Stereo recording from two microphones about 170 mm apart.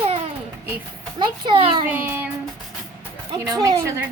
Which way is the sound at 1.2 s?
25° right (ahead or behind).